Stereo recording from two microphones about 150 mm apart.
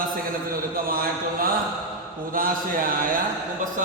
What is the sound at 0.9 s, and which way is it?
A man's voice, 75° right (ahead or behind).